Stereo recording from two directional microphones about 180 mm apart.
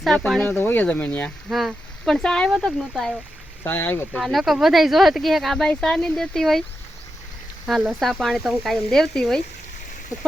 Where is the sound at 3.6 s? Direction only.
10° left (ahead or behind).